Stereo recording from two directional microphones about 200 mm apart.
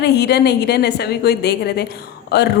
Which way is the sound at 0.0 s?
55° left (ahead or behind).